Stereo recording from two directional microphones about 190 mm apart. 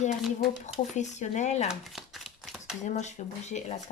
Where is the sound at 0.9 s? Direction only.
40° left (ahead or behind).